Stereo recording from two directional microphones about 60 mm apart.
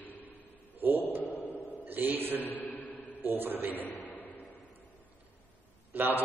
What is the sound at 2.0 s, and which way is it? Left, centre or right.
A man's voice, right.